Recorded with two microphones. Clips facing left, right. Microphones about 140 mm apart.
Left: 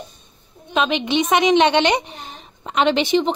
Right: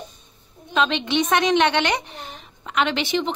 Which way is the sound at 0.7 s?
15° left (ahead or behind).